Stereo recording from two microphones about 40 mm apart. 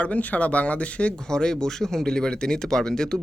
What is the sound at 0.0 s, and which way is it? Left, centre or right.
Speech, left.